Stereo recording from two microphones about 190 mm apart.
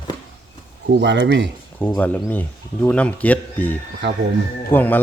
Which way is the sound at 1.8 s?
10° left (ahead or behind).